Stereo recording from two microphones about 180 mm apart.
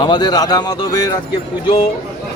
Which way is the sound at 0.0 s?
25° left (ahead or behind).